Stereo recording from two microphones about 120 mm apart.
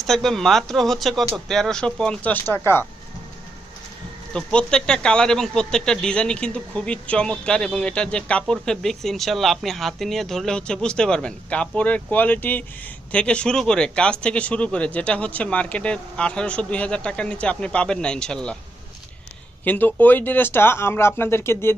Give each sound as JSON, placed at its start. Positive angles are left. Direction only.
{"t": 0.0, "sound": "speech", "side_deg": 5}
{"t": 4.4, "sound": "speech", "side_deg": 5}
{"t": 19.6, "sound": "speech", "side_deg": 15}